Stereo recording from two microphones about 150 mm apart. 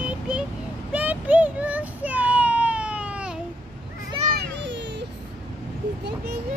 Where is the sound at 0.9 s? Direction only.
10° right (ahead or behind).